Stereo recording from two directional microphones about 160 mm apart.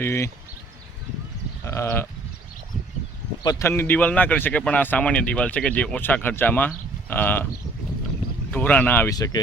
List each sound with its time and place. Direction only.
0.0 s speech: 15° left (ahead or behind)
1.6 s sheep: 15° left (ahead or behind)
3.4 s speech: 20° left (ahead or behind)
8.4 s speech: 10° left (ahead or behind)
9.1 s speech: 25° left (ahead or behind)